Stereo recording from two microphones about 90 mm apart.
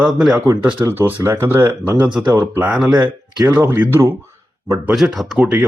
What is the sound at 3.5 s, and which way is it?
Speech, 25° right (ahead or behind).